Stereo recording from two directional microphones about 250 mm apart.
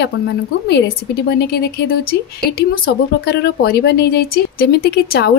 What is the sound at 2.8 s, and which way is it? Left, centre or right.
Speech, left.